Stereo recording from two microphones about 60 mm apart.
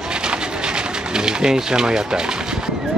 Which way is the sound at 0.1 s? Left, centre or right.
Centre.